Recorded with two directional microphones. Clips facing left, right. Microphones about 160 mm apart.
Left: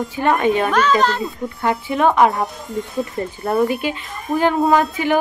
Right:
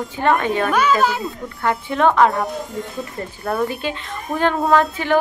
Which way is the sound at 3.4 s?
20° left (ahead or behind).